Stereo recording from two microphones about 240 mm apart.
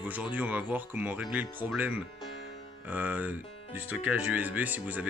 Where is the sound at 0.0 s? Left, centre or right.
Centre.